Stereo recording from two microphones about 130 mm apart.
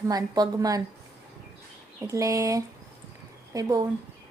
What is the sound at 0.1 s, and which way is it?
Speech, 30° right (ahead or behind).